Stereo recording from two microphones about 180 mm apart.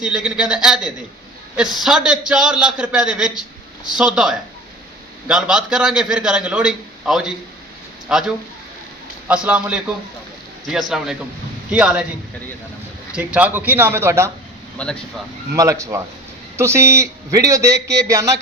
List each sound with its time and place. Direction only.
0.0 s a man's voice: 5° right (ahead or behind)
13.1 s a man's voice: 5° right (ahead or behind)
14.8 s a man's voice: 5° left (ahead or behind)
15.5 s a man's voice: 20° right (ahead or behind)